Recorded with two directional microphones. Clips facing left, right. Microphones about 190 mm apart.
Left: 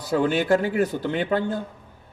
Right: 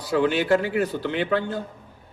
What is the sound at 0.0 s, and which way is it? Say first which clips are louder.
A man's voice: even; 50° left (ahead or behind).